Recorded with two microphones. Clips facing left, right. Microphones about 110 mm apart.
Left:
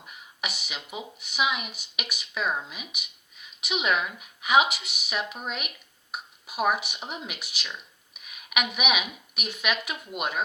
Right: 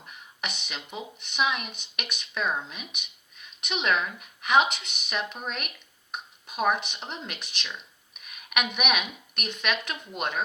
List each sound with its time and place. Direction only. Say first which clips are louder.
0.0 s speech: left 1 dB; 5° left (ahead or behind)